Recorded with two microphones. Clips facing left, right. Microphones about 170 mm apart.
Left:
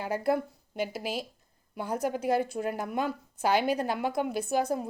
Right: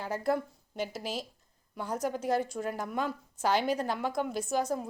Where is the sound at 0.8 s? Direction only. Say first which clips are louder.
Left 3 dB; 60° left (ahead or behind).